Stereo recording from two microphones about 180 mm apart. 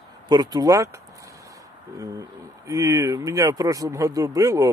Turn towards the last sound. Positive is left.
turn(degrees=-20)  # may be behind; listen again after turning